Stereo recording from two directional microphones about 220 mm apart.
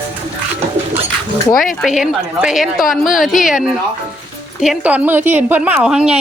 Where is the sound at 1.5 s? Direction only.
40° left (ahead or behind).